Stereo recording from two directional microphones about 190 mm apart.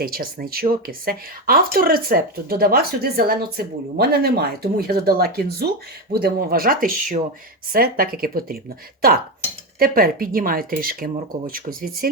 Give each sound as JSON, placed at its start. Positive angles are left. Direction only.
{"t": 0.0, "sound": "speech", "side_deg": -50}